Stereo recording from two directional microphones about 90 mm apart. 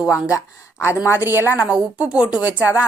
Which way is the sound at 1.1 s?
25° right (ahead or behind).